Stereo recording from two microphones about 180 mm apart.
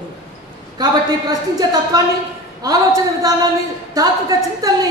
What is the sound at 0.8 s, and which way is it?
A woman's voice, 20° right (ahead or behind).